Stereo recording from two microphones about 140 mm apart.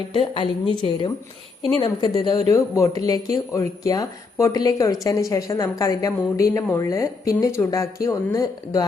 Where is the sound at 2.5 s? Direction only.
20° left (ahead or behind).